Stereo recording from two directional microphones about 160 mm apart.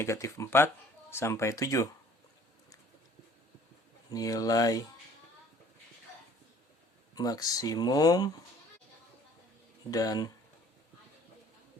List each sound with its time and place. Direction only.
0.0 s speech: 20° left (ahead or behind)
4.1 s speech: 20° left (ahead or behind)
7.2 s speech: 25° left (ahead or behind)
9.9 s speech: 25° left (ahead or behind)